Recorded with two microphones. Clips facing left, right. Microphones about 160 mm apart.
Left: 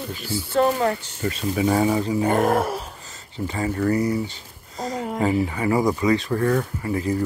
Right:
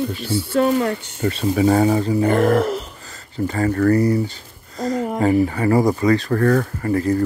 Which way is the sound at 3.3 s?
45° right (ahead or behind).